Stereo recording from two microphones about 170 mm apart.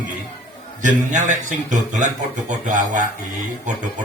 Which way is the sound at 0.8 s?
45° right (ahead or behind).